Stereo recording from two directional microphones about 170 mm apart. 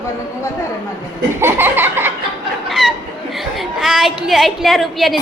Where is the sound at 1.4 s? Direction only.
10° right (ahead or behind).